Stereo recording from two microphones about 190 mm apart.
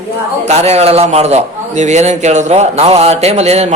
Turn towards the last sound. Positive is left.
turn(degrees=-35)  # may be behind; listen again after turning